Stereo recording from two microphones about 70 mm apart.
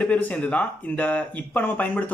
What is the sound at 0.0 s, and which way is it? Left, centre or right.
Speech, centre.